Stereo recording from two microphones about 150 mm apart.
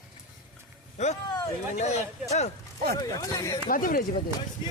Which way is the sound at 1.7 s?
50° left (ahead or behind).